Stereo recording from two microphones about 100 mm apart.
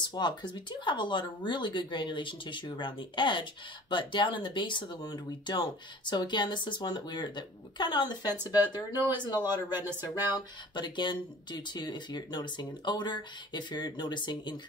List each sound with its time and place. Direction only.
0.0 s speech: 50° left (ahead or behind)
9.8 s speech: 20° right (ahead or behind)
10.3 s speech: 50° left (ahead or behind)